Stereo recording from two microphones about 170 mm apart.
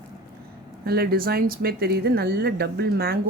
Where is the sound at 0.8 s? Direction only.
65° right (ahead or behind).